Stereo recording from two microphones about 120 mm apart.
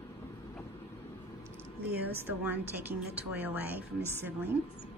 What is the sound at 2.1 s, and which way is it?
Speech, 15° right (ahead or behind).